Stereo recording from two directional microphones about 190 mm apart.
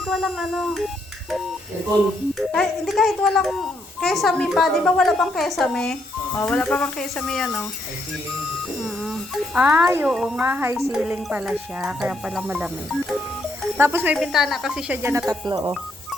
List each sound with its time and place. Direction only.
0.0 s a child's voice: centre (ahead or behind)
2.5 s a child's voice: centre (ahead or behind)
8.8 s a child's voice: centre (ahead or behind)
10.4 s a woman's voice: 10° right (ahead or behind)